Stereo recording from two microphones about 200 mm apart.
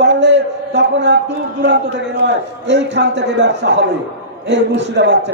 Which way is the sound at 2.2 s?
60° right (ahead or behind).